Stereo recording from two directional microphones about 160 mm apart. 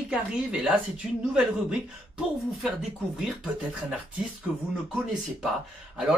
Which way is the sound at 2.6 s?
Centre (ahead or behind).